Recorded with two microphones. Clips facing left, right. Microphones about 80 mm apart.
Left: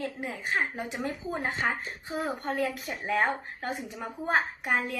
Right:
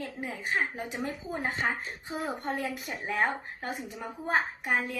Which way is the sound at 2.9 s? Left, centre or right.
Centre.